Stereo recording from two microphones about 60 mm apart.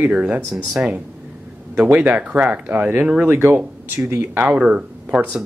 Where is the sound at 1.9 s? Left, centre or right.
Right.